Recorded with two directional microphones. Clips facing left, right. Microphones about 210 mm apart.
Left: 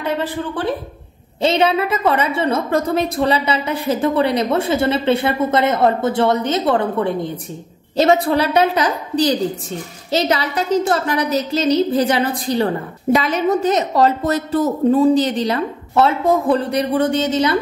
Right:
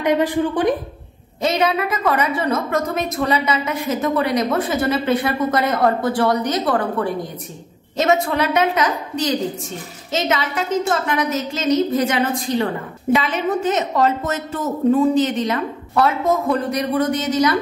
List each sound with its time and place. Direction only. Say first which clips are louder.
0.0 s a woman's voice: right 4 dB; 15° right (ahead or behind)
1.4 s a woman's voice: left 3 dB; 30° left (ahead or behind)